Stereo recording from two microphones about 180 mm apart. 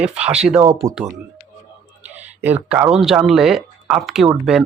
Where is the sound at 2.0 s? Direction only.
10° right (ahead or behind).